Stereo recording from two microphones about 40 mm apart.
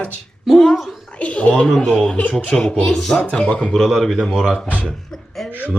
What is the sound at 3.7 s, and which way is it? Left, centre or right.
Speech, centre.